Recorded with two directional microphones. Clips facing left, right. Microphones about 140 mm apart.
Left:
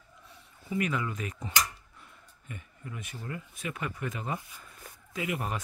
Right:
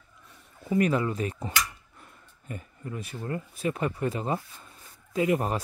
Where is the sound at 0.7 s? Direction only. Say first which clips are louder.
Right 7 dB; 40° right (ahead or behind).